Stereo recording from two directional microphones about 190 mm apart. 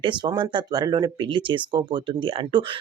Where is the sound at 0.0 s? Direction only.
25° right (ahead or behind).